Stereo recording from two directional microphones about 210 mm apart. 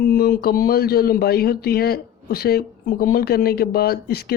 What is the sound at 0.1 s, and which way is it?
Speech, 45° left (ahead or behind).